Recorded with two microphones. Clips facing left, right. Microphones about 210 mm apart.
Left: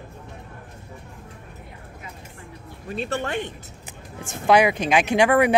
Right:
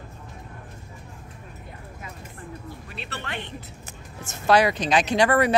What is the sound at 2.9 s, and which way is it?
Speech, 45° left (ahead or behind).